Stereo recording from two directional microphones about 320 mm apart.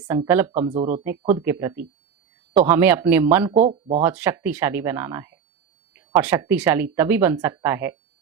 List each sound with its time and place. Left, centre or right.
0.1 s speech: centre
0.5 s speech: centre
1.2 s speech: centre
3.7 s speech: centre
4.0 s speech: centre